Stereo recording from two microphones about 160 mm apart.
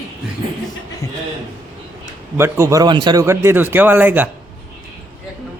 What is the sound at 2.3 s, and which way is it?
A man's voice, 15° right (ahead or behind).